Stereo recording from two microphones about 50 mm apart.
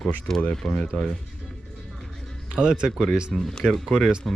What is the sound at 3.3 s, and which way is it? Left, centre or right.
Speech, centre.